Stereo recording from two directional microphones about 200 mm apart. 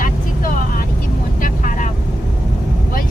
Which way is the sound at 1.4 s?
40° left (ahead or behind).